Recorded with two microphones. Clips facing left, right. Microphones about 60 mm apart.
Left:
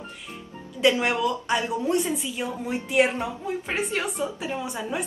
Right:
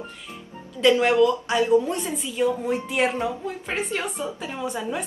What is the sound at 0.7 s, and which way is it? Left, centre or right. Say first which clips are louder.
Speech: right 3 dB; centre.